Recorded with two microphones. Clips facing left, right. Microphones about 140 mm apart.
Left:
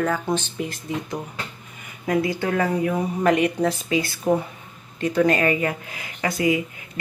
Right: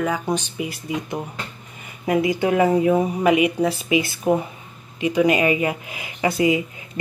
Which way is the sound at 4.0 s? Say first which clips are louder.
Right 1 dB; 20° right (ahead or behind).